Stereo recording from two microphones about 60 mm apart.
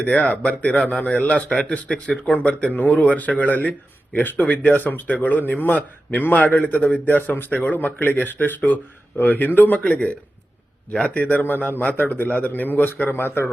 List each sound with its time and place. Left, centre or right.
0.0 s speech: left
9.8 s a man's voice: left